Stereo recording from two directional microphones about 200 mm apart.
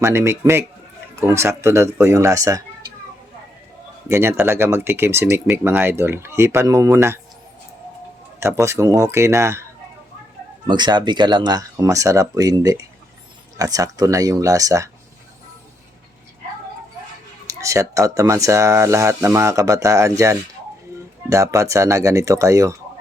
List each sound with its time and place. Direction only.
0.0 s speech: 15° right (ahead or behind)
4.1 s speech: 10° right (ahead or behind)
8.4 s speech: 15° right (ahead or behind)
10.7 s speech: 20° right (ahead or behind)
17.4 s speech: 15° right (ahead or behind)